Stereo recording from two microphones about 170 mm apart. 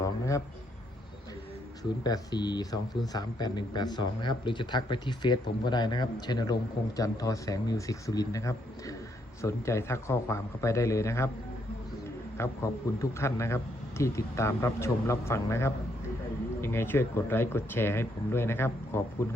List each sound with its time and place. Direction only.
0.0 s a sound: 20° left (ahead or behind)
2.0 s speech: 25° left (ahead or behind)
12.4 s speech: 15° left (ahead or behind)